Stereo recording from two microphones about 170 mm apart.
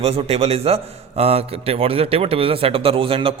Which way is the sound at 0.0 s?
35° right (ahead or behind).